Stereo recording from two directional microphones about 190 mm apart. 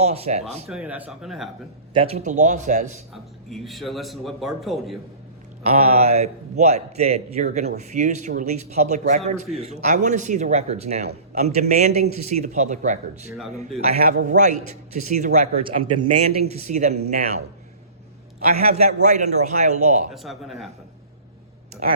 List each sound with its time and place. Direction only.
0.0 s a man's voice: 35° right (ahead or behind)
0.7 s a man's voice: 5° right (ahead or behind)
1.9 s a man's voice: 30° right (ahead or behind)
3.5 s a man's voice: centre (ahead or behind)
5.6 s a man's voice: 35° right (ahead or behind)
13.9 s a man's voice: 50° right (ahead or behind)
18.5 s a man's voice: 35° right (ahead or behind)
20.1 s a man's voice: centre (ahead or behind)